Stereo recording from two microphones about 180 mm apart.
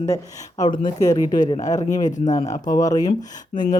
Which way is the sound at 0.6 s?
20° left (ahead or behind).